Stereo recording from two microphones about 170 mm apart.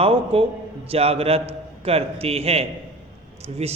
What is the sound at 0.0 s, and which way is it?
A man's voice, 35° right (ahead or behind).